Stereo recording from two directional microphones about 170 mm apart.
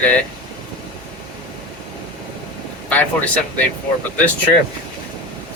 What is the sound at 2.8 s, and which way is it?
Speech, 10° left (ahead or behind).